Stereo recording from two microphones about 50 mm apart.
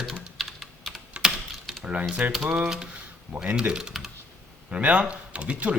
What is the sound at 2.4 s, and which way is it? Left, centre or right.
Speech, right.